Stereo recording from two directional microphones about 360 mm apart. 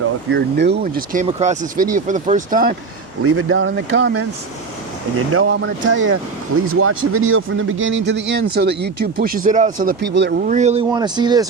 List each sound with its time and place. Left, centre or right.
0.3 s speech: right
3.2 s speech: right
5.3 s speech: right; by 11.4 s centre